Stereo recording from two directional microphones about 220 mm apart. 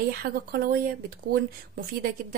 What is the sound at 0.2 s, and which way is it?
Speech, 45° right (ahead or behind).